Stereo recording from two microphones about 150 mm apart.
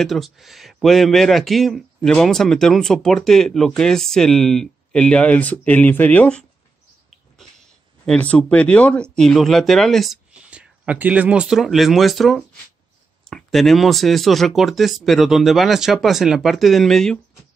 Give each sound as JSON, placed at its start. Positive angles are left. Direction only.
{"t": 0.0, "sound": "speech", "side_deg": 0}
{"t": 8.0, "sound": "speech", "side_deg": 5}